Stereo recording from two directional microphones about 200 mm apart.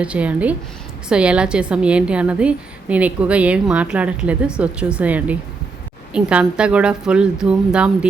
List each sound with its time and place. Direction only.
0.0 s a woman's voice: 5° right (ahead or behind)